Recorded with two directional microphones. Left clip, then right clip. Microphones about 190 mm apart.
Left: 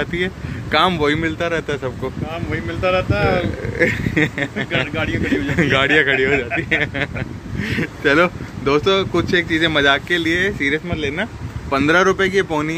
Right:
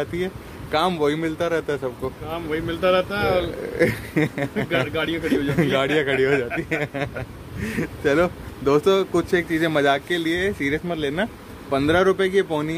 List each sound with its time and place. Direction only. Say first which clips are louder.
0.0 s speech: left 5 dB; centre (ahead or behind)
2.5 s speech: left 1 dB; 55° right (ahead or behind)
3.7 s speech: left 4 dB; 10° right (ahead or behind)
6.1 s a man's voice: left 3 dB; 20° right (ahead or behind)
6.7 s speech: left 6 dB; 10° right (ahead or behind)
8.6 s speech: left 2 dB; 15° right (ahead or behind)
10.6 s speech: left 4 dB; 15° right (ahead or behind)
11.0 s a man's voice: left 2 dB; 30° right (ahead or behind)
11.7 s speech: left 4 dB; 5° right (ahead or behind)